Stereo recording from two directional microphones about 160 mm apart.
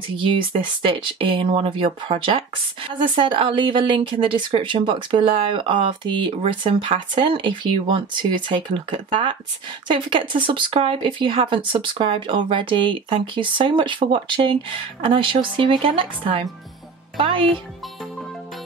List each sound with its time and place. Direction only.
0.2 s speech: 35° right (ahead or behind)